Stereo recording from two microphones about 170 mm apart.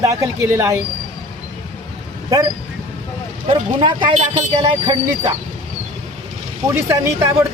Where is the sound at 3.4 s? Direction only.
30° right (ahead or behind).